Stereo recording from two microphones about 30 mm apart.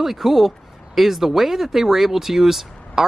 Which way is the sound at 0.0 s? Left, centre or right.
Centre.